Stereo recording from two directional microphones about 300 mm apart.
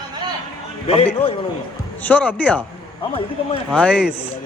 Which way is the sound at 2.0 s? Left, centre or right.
Centre.